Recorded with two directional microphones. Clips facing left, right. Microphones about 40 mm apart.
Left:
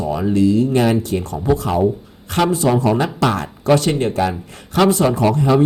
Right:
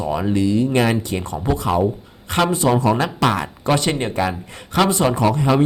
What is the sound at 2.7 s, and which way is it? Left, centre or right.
Speech, right.